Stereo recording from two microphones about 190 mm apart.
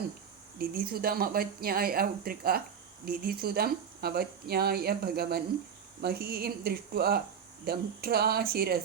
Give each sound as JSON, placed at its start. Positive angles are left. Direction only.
{"t": 0.6, "sound": "speech", "side_deg": -50}